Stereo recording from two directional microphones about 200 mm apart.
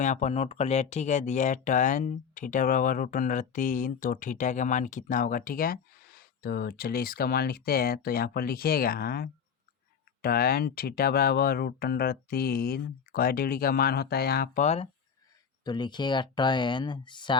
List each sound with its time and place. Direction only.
0.0 s speech: 35° left (ahead or behind); by 14.6 s 50° left (ahead or behind)
14.6 s speech: 35° left (ahead or behind)
15.6 s speech: 20° left (ahead or behind)